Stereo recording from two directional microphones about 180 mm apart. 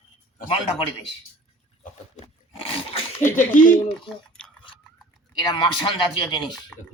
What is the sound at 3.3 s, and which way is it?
Speech, 45° left (ahead or behind).